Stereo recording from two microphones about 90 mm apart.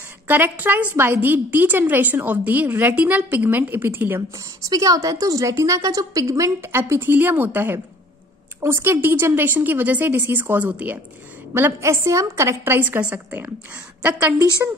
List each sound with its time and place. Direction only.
0.3 s a woman's voice: 20° right (ahead or behind)
4.6 s a woman's voice: 40° right (ahead or behind); by 11.0 s 15° right (ahead or behind)
11.5 s a woman's voice: 30° right (ahead or behind)